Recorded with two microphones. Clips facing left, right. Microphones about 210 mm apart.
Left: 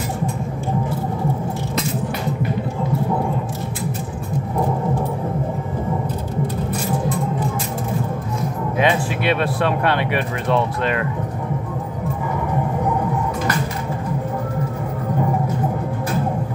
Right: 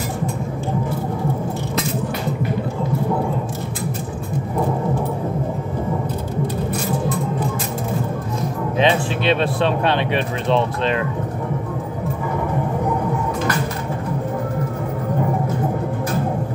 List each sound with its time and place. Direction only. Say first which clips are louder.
8.7 s speech: right 1 dB; 25° right (ahead or behind)